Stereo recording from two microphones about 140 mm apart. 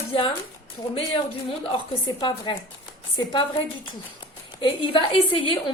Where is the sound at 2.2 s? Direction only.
35° left (ahead or behind).